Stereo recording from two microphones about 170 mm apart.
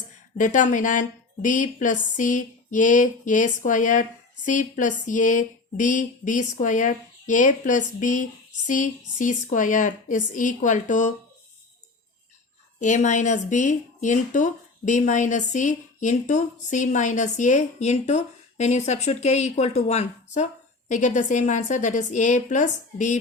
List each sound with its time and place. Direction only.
0.3 s speech: 50° left (ahead or behind)
12.8 s speech: 45° left (ahead or behind)